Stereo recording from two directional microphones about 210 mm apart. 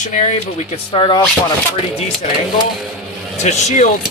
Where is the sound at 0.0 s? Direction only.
40° left (ahead or behind).